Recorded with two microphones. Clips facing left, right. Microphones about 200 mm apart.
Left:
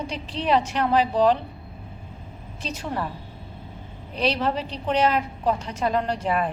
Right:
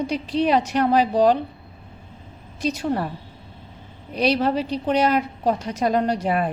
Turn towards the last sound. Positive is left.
turn(degrees=-40)  # may be behind; listen again after turning